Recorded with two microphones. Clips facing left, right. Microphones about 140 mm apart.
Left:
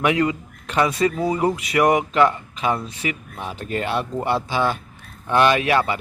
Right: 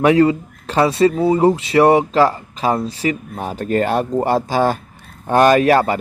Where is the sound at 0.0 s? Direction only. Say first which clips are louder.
Right 7 dB; 35° right (ahead or behind).